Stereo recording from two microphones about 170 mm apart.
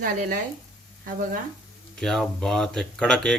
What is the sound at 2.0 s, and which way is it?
Speech, 5° left (ahead or behind).